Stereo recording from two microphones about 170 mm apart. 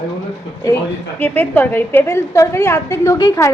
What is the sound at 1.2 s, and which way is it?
A woman's voice, 10° left (ahead or behind).